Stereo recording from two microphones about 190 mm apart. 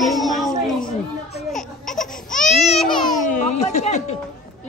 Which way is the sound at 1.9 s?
45° left (ahead or behind).